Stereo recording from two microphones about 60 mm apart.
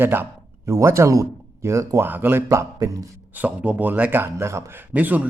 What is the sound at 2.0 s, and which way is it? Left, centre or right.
Speech, right.